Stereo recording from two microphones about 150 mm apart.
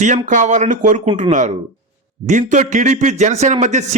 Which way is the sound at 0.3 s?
55° right (ahead or behind).